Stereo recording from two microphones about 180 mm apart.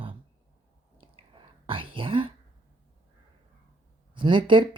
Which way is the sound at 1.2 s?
30° right (ahead or behind).